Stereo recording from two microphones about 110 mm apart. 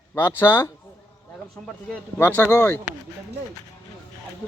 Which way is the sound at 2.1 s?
20° left (ahead or behind).